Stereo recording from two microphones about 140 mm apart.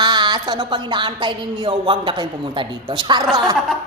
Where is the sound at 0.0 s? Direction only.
30° right (ahead or behind).